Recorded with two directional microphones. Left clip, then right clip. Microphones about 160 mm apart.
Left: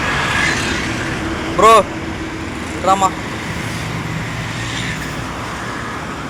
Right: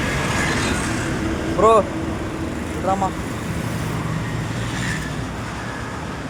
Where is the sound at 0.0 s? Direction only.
90° right.